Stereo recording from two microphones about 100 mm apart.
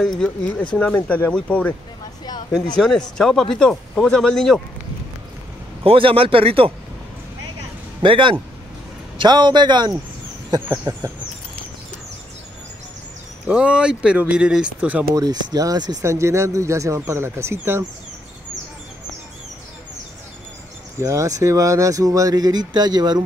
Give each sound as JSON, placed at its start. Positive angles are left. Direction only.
{"t": 0.0, "sound": "speech", "side_deg": 0}
{"t": 0.7, "sound": "speech", "side_deg": 15}
{"t": 2.2, "sound": "speech", "side_deg": 45}
{"t": 2.8, "sound": "speech", "side_deg": 5}
{"t": 5.9, "sound": "speech", "side_deg": -65}
{"t": 8.0, "sound": "a man's voice", "side_deg": -55}
{"t": 13.5, "sound": "speech", "side_deg": -10}
{"t": 15.1, "sound": "speech", "side_deg": -40}
{"t": 21.0, "sound": "speech", "side_deg": -30}